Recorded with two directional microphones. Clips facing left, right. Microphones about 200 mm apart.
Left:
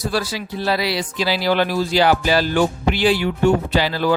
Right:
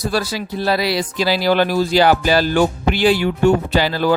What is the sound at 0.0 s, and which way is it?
Speech, 40° right (ahead or behind).